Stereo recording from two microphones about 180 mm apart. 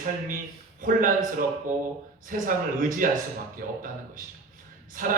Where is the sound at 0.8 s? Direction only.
50° right (ahead or behind).